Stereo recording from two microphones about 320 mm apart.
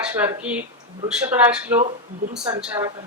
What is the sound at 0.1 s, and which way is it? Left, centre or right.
A man's voice, centre.